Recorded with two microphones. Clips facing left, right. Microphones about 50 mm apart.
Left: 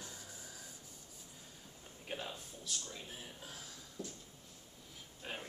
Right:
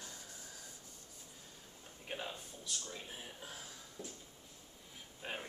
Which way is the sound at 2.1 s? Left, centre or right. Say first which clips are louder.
Even; centre.